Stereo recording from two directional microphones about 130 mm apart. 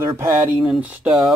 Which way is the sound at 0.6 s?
10° right (ahead or behind).